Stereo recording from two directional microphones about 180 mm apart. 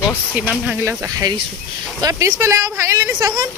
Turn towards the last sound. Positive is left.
turn(degrees=-20)  # may be behind; listen again after turning